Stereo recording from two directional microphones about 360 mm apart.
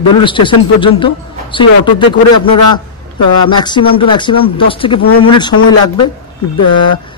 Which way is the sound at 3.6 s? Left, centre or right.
Centre.